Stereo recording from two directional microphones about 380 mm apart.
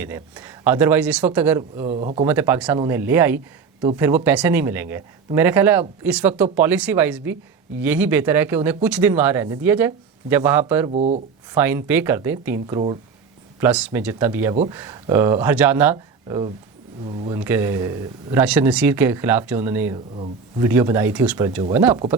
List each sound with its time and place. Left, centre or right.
0.0 s speech: centre
2.2 s speech: centre
10.9 s speech: centre
11.5 s speech: centre